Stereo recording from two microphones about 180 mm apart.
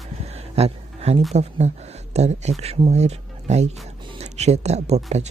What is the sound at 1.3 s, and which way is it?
Speech, 35° right (ahead or behind).